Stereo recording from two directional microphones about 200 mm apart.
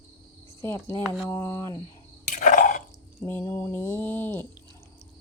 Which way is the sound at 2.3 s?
40° left (ahead or behind).